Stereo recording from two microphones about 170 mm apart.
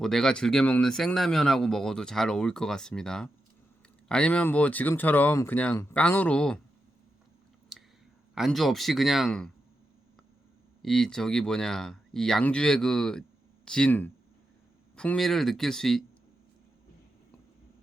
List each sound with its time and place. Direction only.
0.0 s speech: centre (ahead or behind)
7.7 s a sound: centre (ahead or behind)
8.4 s speech: centre (ahead or behind)
10.8 s speech: centre (ahead or behind)